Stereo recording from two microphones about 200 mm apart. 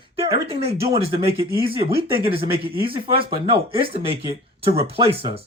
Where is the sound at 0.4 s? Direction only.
30° right (ahead or behind).